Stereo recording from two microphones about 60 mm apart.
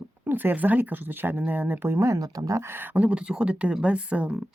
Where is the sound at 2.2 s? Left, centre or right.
Right.